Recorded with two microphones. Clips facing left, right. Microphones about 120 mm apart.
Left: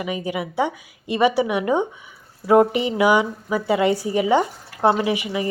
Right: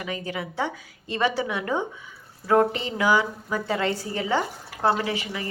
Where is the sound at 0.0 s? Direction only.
15° left (ahead or behind).